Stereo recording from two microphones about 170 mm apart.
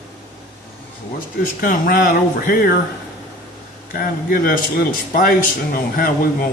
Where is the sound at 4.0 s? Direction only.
55° left (ahead or behind).